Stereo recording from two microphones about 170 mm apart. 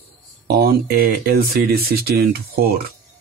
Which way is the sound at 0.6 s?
60° right (ahead or behind).